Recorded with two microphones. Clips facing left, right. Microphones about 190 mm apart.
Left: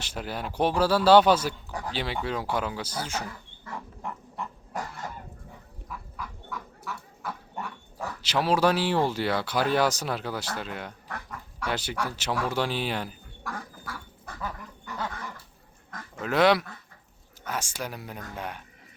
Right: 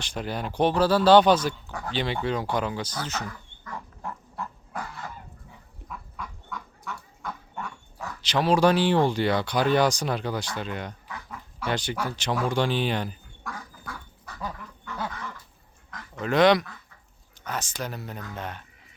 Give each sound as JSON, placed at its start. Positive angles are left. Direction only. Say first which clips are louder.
{"t": 0.0, "sound": "speech", "louder": "right 3 dB", "side_deg": 5}
{"t": 3.6, "sound": "pig", "louder": "even", "side_deg": 20}
{"t": 4.7, "sound": "goose", "louder": "left 1 dB", "side_deg": 45}
{"t": 5.9, "sound": "livestock", "louder": "even", "side_deg": 5}
{"t": 8.2, "sound": "speech", "louder": "right 3 dB", "side_deg": 5}
{"t": 14.3, "sound": "dog", "louder": "left 1 dB", "side_deg": 50}
{"t": 16.2, "sound": "speech", "louder": "right 2 dB", "side_deg": 5}